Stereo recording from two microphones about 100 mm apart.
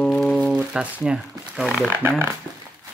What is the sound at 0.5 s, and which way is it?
Speech, 10° right (ahead or behind).